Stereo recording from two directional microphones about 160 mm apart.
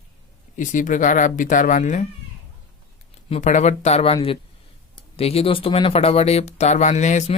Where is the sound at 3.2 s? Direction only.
45° left (ahead or behind).